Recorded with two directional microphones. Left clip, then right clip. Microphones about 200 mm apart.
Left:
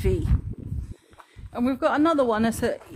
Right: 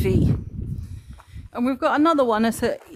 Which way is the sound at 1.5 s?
25° right (ahead or behind).